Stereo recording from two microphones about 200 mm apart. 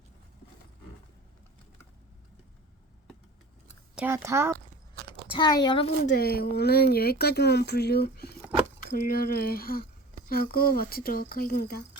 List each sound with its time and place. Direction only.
3.9 s speech: 10° right (ahead or behind)
5.3 s a woman's voice: 20° left (ahead or behind)
6.1 s speech: 50° left (ahead or behind)